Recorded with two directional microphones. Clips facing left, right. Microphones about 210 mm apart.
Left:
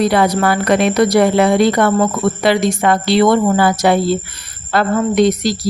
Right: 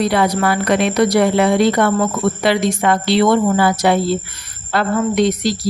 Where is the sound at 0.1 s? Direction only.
45° left (ahead or behind).